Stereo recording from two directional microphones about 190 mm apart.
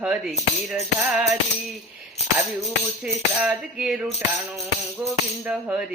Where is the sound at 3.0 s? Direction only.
5° right (ahead or behind).